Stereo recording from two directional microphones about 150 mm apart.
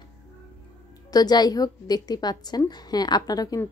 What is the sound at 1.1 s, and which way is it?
A woman's voice, 25° left (ahead or behind).